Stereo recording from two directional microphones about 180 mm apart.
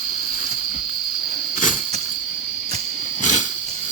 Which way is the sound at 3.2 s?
40° left (ahead or behind).